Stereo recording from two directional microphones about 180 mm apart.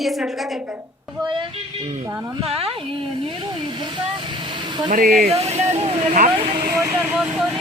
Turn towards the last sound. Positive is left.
turn(degrees=-5)  # may be behind; listen again after turning